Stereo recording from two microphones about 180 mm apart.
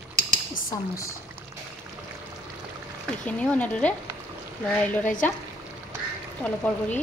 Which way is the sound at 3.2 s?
10° left (ahead or behind).